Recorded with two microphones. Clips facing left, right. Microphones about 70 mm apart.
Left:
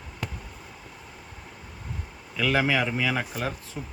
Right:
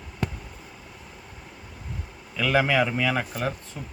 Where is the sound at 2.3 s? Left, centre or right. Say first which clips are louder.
Right 2 dB; centre.